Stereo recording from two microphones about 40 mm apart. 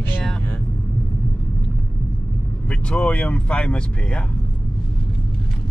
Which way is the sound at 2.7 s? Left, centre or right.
Left.